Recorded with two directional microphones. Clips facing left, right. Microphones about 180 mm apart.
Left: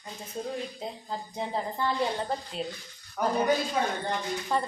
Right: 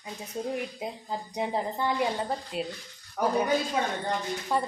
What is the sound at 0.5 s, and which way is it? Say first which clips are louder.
A woman's voice: right 2 dB; 15° right (ahead or behind).